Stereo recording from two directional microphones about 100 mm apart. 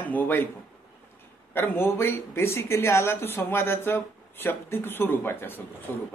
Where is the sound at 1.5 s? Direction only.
20° left (ahead or behind).